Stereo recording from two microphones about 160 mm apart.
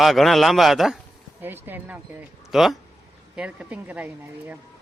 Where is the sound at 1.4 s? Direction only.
15° right (ahead or behind).